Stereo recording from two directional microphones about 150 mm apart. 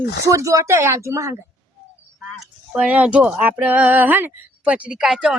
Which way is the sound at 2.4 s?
5° right (ahead or behind).